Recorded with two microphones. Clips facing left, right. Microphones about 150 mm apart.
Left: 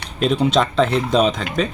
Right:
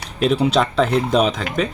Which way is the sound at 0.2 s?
5° right (ahead or behind).